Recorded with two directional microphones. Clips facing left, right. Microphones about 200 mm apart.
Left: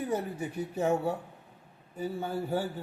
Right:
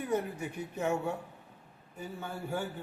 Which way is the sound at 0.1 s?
35° left (ahead or behind).